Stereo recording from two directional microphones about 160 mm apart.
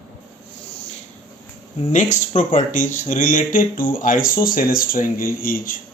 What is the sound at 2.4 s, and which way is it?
Speech, 50° left (ahead or behind).